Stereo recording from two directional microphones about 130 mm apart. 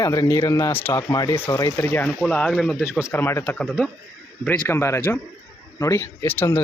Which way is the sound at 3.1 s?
20° left (ahead or behind).